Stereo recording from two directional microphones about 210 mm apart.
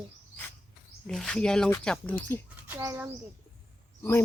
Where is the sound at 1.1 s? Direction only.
5° left (ahead or behind).